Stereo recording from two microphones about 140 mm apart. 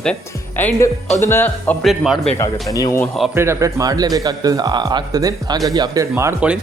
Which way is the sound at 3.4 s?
20° right (ahead or behind).